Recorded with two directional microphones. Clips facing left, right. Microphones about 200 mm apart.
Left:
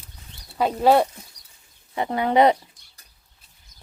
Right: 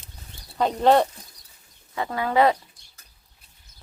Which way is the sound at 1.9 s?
20° left (ahead or behind).